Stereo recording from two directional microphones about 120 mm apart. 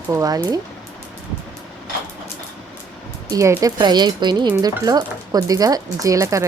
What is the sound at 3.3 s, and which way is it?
Speech, 30° right (ahead or behind).